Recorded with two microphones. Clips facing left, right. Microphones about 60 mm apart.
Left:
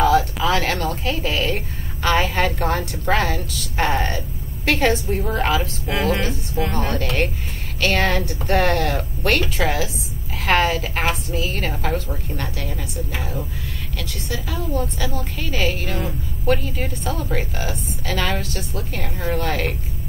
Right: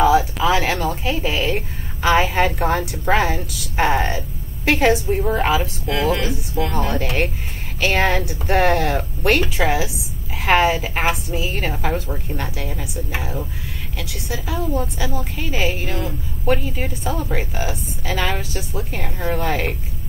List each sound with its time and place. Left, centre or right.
0.0 s a sound: centre
2.0 s a woman's voice: centre
5.9 s speech: centre
6.7 s speech: centre
7.0 s a woman's voice: centre